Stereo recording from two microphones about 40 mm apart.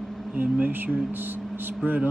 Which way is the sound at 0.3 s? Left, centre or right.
Right.